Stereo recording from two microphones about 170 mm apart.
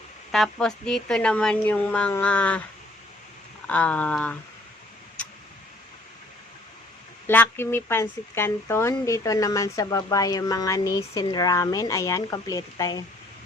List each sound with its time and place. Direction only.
0.3 s a woman's voice: centre (ahead or behind)
3.7 s a woman's voice: 10° left (ahead or behind)
7.3 s speech: 15° left (ahead or behind)